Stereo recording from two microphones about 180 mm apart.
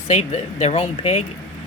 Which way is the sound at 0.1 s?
40° left (ahead or behind).